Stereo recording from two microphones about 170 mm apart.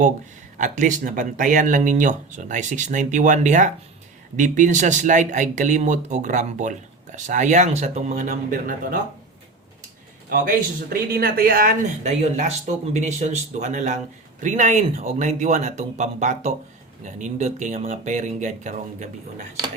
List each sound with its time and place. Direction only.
0.5 s speech: 50° right (ahead or behind)
10.3 s speech: 60° right (ahead or behind)
12.0 s speech: 40° right (ahead or behind)